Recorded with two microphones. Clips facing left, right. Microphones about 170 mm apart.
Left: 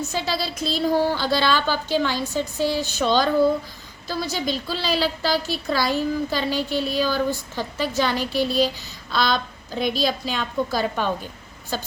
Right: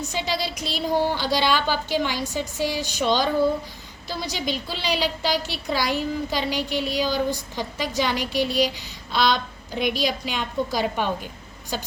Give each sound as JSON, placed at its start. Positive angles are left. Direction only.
{"t": 0.0, "sound": "a woman's voice", "side_deg": -15}